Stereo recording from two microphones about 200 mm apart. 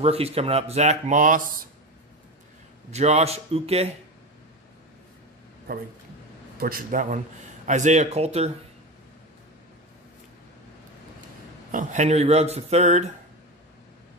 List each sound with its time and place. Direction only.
0.0 s speech: 30° right (ahead or behind)
2.9 s speech: 35° right (ahead or behind)
6.6 s speech: 45° right (ahead or behind)
11.7 s speech: 35° right (ahead or behind)